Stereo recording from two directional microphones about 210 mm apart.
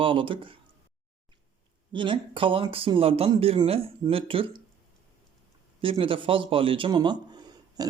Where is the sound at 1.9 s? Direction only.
25° right (ahead or behind).